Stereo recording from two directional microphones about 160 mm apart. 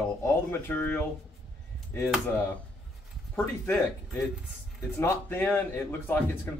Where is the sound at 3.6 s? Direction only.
15° left (ahead or behind).